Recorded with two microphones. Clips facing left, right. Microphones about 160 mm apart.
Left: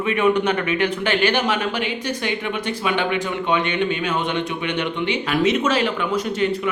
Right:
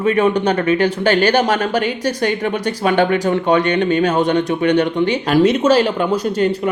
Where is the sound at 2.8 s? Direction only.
45° right (ahead or behind).